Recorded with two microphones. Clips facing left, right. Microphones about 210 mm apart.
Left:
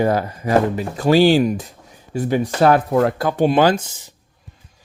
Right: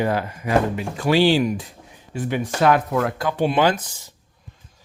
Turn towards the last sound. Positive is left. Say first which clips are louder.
# left 4 dB
turn(degrees=40)  # may be behind; listen again after turning